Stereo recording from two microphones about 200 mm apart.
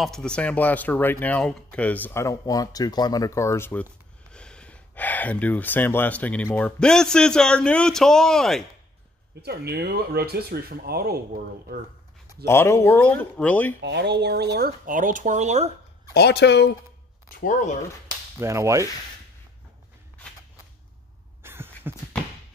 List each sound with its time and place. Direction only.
0.0 s speech: 5° left (ahead or behind)
9.4 s speech: 55° right (ahead or behind)
12.4 s speech: 15° left (ahead or behind)
13.8 s speech: 60° right (ahead or behind); by 15.7 s 35° right (ahead or behind)
16.1 s speech: 55° left (ahead or behind)
17.4 s speech: 40° left (ahead or behind)
18.4 s whip: 15° right (ahead or behind)
21.4 s a sound: 10° right (ahead or behind)